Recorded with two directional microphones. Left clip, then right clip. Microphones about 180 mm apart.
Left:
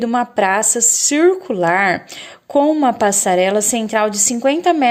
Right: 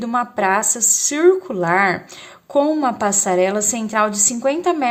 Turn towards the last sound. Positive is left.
turn(degrees=30)  # may be behind; listen again after turning